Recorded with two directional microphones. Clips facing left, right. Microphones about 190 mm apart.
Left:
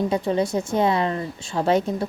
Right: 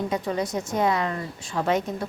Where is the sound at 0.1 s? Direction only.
30° left (ahead or behind).